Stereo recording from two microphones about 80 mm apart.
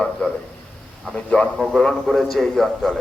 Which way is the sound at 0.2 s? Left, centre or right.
Centre.